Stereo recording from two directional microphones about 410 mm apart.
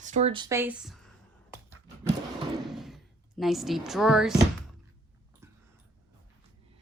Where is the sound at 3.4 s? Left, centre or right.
Centre.